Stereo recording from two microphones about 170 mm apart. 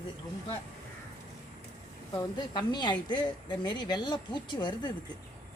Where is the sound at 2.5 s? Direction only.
25° left (ahead or behind).